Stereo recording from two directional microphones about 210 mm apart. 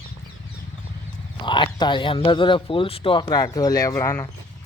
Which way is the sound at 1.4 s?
20° left (ahead or behind).